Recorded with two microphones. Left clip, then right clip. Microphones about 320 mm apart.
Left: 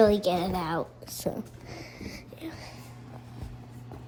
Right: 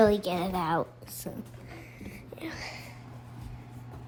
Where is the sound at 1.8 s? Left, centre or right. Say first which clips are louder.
Left 7 dB; centre.